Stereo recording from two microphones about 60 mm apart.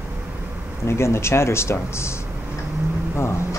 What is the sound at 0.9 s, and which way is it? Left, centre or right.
Speech, left.